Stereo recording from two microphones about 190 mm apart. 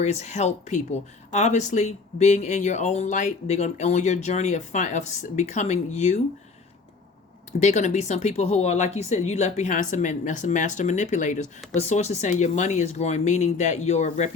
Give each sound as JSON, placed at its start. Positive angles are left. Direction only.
{"t": 0.0, "sound": "speech", "side_deg": 40}
{"t": 7.6, "sound": "speech", "side_deg": 40}